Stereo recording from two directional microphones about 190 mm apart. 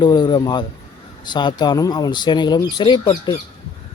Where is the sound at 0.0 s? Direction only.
25° left (ahead or behind).